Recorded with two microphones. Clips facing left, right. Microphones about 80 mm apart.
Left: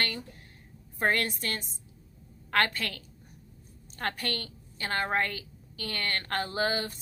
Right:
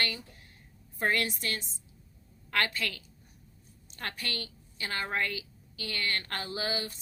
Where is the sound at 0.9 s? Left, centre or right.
Left.